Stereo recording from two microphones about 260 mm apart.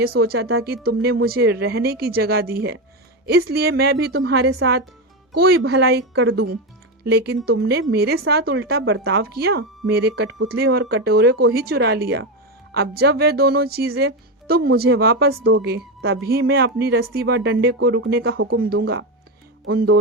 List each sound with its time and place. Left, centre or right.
0.0 s speech: right